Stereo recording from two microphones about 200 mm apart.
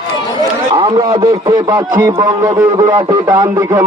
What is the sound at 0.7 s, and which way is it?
A man's voice, 25° right (ahead or behind).